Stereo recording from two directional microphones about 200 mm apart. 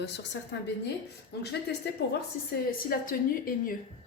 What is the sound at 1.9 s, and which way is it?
Speech, 55° left (ahead or behind).